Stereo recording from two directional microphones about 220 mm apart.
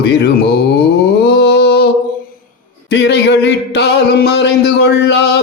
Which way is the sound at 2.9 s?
50° left (ahead or behind).